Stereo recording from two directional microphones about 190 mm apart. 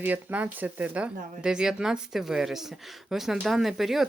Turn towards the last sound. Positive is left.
turn(degrees=0)  # may be behind; listen again after turning